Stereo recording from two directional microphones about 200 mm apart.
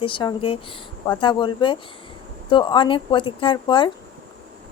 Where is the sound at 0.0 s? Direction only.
25° left (ahead or behind).